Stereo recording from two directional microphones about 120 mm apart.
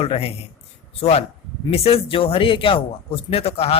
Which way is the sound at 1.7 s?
55° left (ahead or behind).